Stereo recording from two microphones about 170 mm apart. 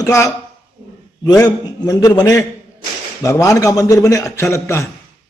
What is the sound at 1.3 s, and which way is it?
A man's voice, 20° left (ahead or behind).